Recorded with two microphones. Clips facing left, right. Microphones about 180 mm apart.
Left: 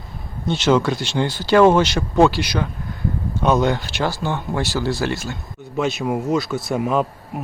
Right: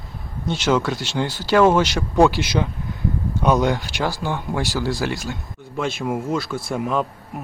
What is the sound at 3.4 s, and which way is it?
Speech, 10° right (ahead or behind).